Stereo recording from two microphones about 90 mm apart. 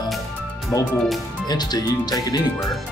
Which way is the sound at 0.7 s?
40° left (ahead or behind).